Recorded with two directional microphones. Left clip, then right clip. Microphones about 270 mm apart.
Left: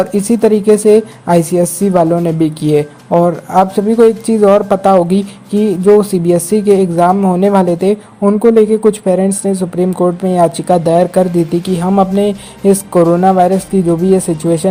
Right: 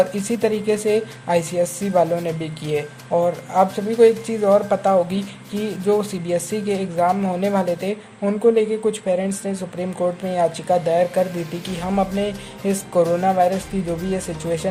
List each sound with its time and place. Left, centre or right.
0.0 s a woman's voice: left